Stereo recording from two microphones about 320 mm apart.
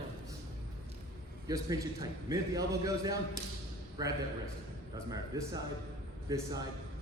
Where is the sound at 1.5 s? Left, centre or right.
Centre.